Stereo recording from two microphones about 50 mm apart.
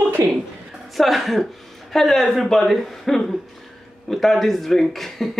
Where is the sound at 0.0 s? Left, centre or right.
Right.